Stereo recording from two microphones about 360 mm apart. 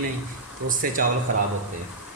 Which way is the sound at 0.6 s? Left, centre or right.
Right.